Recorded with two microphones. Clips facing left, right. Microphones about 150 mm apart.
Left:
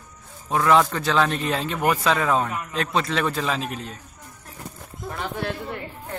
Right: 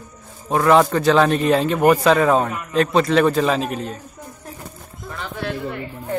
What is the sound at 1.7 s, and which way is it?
Speech, 40° right (ahead or behind).